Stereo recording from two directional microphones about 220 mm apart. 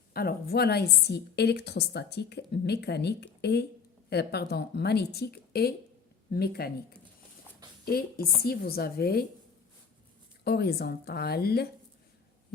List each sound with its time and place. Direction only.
0.1 s a woman's voice: 45° left (ahead or behind)
7.9 s a woman's voice: 45° left (ahead or behind)
10.4 s a woman's voice: 45° left (ahead or behind)